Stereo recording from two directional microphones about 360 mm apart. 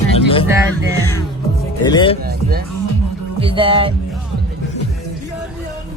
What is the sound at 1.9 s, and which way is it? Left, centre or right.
Speech, centre.